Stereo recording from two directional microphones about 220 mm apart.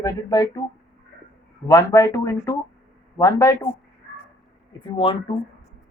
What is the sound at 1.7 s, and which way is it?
Speech, 15° left (ahead or behind).